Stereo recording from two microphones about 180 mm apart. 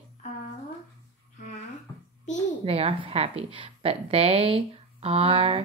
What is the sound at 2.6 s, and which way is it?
A woman's voice, 35° right (ahead or behind).